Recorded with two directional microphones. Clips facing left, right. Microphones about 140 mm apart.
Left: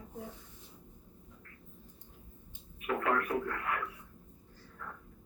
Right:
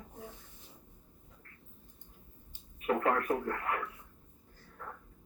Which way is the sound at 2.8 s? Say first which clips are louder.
Right 2 dB; 35° right (ahead or behind).